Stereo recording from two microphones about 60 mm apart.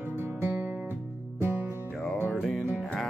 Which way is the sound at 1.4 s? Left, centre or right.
Right.